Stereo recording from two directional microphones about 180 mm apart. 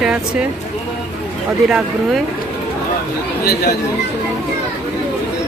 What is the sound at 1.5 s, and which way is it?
Speech, 5° right (ahead or behind).